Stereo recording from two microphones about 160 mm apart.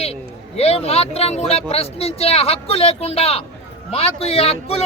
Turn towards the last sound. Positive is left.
turn(degrees=40)  # may be behind; listen again after turning